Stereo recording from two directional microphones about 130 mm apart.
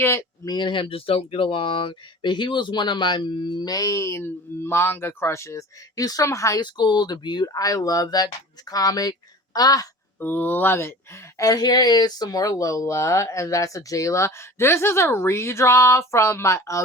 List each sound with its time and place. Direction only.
0.0 s speech: 20° left (ahead or behind)
0.4 s speech: 35° left (ahead or behind)
10.2 s speech: 15° left (ahead or behind)